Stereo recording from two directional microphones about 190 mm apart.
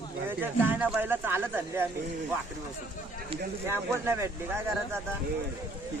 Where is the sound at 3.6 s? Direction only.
15° right (ahead or behind).